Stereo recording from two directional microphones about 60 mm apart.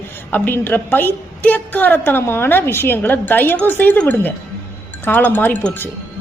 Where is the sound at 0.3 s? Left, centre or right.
Left.